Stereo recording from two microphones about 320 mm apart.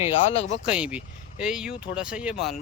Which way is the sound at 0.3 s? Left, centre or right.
Centre.